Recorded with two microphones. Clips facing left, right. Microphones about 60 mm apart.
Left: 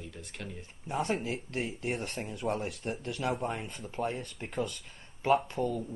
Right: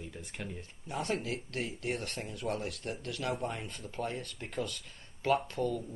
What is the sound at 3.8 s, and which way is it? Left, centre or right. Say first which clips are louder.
Speech: left 4 dB; centre.